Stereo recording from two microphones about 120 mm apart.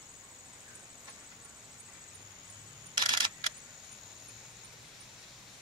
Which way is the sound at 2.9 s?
35° right (ahead or behind).